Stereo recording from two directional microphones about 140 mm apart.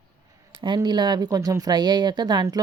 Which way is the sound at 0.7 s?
30° right (ahead or behind).